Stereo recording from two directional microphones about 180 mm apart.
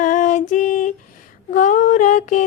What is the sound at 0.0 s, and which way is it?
Female singing, 45° left (ahead or behind).